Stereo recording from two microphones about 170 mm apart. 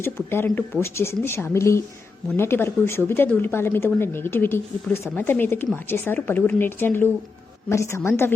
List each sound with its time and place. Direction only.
0.0 s speech: 15° left (ahead or behind)